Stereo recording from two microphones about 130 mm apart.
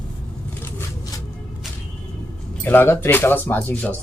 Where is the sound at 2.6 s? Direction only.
15° left (ahead or behind).